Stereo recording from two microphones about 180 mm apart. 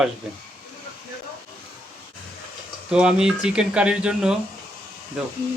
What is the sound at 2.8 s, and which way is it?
Speech, 5° right (ahead or behind).